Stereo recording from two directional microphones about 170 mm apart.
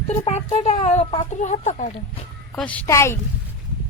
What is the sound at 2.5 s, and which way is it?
Speech, 5° left (ahead or behind).